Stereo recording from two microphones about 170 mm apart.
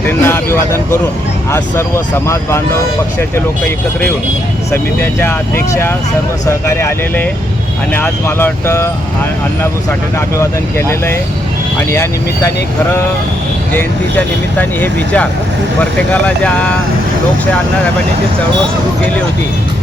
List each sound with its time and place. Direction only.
0.0 s speech: 15° left (ahead or behind)
4.7 s speech: 15° left (ahead or behind)
6.4 s speech: 15° left (ahead or behind)
10.2 s speech: 15° left (ahead or behind)
13.7 s speech: 10° left (ahead or behind)